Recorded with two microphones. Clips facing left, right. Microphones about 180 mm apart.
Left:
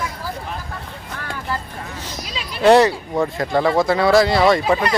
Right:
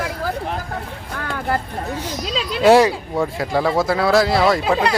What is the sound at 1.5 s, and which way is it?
Speech, 60° right (ahead or behind).